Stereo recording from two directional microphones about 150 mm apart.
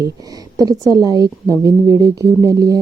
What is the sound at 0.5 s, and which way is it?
A woman's voice, 25° right (ahead or behind).